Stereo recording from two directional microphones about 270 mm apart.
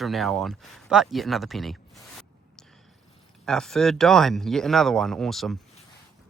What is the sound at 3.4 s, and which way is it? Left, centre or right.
Speech, centre.